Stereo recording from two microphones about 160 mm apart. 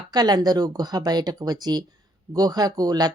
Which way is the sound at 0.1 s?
25° right (ahead or behind).